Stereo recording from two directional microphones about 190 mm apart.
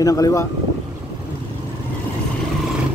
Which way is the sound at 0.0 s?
20° left (ahead or behind).